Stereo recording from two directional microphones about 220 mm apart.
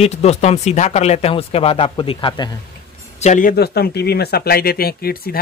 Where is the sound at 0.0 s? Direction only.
30° left (ahead or behind).